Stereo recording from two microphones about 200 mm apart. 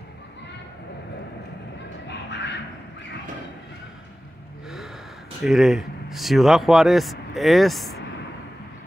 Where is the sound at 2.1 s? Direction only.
60° left (ahead or behind).